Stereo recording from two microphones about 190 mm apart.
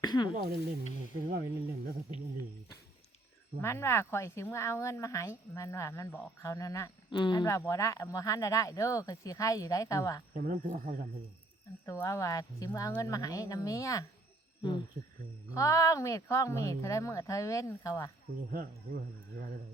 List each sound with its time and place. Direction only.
0.0 s speech: 20° left (ahead or behind)
1.3 s speech: 55° right (ahead or behind)
3.6 s speech: 15° left (ahead or behind)
10.3 s speech: 45° right (ahead or behind)
11.9 s speech: 15° left (ahead or behind)
15.5 s speech: 15° left (ahead or behind)
18.5 s speech: 50° right (ahead or behind)